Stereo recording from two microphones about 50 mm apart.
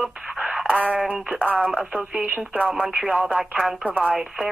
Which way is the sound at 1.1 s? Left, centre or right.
Right.